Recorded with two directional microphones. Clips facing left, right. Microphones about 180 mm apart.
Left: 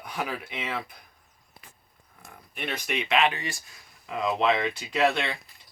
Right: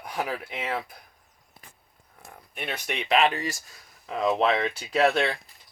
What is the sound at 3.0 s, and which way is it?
Speech, 35° right (ahead or behind).